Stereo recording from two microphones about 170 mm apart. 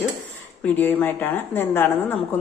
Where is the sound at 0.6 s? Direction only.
10° left (ahead or behind).